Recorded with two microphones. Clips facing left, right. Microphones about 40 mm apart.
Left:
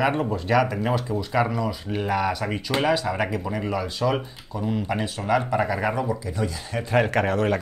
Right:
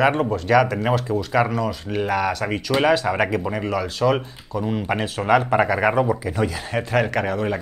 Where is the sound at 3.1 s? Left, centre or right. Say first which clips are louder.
Right 4 dB; right.